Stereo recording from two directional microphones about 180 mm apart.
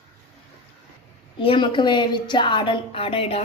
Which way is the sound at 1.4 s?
25° left (ahead or behind).